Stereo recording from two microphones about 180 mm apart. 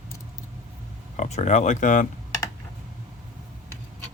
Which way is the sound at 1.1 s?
40° left (ahead or behind).